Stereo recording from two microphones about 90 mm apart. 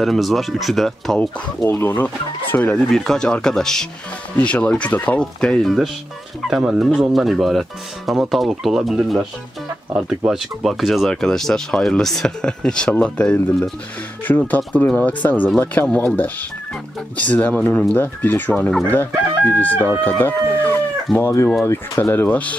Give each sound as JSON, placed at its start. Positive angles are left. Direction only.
{"t": 0.0, "sound": "speech", "side_deg": 0}
{"t": 1.7, "sound": "speech", "side_deg": 25}
{"t": 6.4, "sound": "speech", "side_deg": -10}
{"t": 14.2, "sound": "speech", "side_deg": 20}
{"t": 18.9, "sound": "chicken", "side_deg": 20}
{"t": 20.0, "sound": "speech", "side_deg": 25}